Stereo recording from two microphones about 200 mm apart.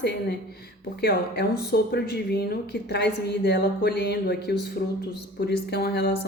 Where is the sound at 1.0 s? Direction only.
50° left (ahead or behind).